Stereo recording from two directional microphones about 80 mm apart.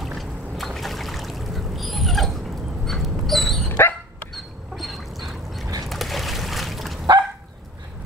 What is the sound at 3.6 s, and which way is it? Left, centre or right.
Dog, left.